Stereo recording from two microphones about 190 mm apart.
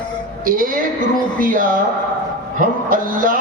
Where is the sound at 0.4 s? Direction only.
45° right (ahead or behind).